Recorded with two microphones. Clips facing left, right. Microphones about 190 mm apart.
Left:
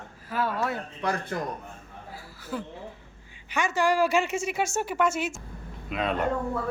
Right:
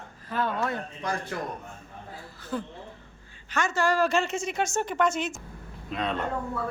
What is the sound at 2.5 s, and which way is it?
A woman's voice, 5° left (ahead or behind).